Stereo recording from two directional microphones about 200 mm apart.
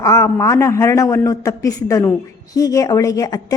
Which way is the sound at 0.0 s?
15° left (ahead or behind).